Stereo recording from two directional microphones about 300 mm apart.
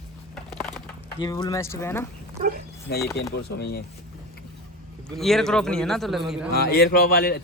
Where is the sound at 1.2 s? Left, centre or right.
Centre.